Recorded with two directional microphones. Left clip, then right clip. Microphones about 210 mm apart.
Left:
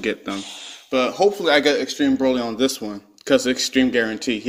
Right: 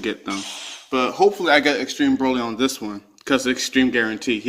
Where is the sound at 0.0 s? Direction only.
10° left (ahead or behind).